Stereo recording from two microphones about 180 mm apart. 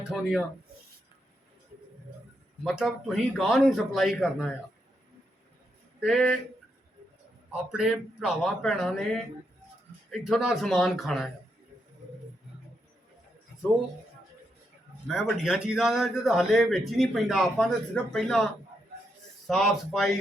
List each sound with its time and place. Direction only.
0.1 s a man's voice: centre (ahead or behind)
2.6 s a man's voice: centre (ahead or behind)
6.0 s a man's voice: centre (ahead or behind)
7.7 s a man's voice: 5° right (ahead or behind)
15.0 s a man's voice: centre (ahead or behind)
19.5 s a man's voice: centre (ahead or behind)